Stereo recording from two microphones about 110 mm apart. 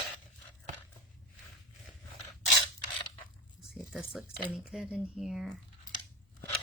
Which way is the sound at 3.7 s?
5° right (ahead or behind).